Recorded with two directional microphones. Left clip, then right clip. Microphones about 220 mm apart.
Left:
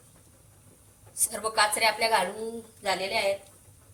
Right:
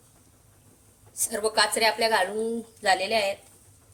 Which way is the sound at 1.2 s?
40° right (ahead or behind).